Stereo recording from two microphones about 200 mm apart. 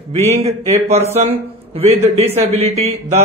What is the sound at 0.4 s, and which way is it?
Speech, 30° right (ahead or behind).